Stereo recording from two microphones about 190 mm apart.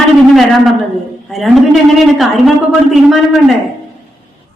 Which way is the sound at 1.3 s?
Centre (ahead or behind).